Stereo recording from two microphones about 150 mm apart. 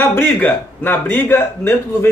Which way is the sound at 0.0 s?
15° left (ahead or behind).